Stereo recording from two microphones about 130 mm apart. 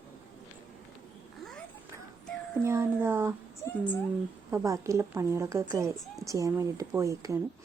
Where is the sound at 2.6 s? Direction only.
20° right (ahead or behind).